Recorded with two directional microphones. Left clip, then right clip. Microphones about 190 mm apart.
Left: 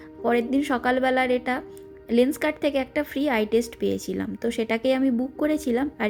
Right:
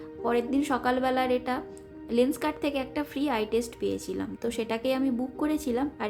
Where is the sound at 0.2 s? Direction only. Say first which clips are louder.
Left 4 dB; 20° left (ahead or behind).